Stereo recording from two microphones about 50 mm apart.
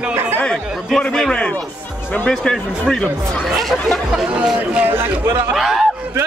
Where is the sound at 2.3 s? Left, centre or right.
Centre.